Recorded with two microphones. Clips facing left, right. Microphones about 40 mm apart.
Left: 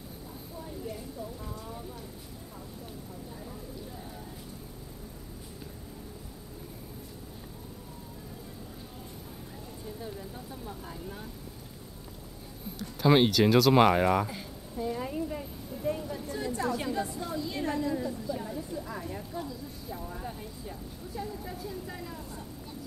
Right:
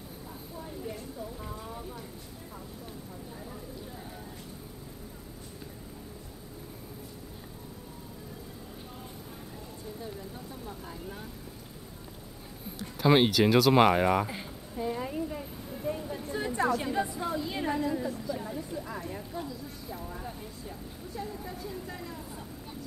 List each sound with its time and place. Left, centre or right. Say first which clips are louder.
1.4 s vehicle: right 1 dB; centre
10.0 s speech: even; centre
13.0 s speech: even; centre
14.3 s a sound: right 1 dB; centre
15.0 s vehicle: even; centre
16.0 s vehicle: right 1 dB; centre
16.8 s a sound: right 2 dB; centre
18.2 s vehicle: even; centre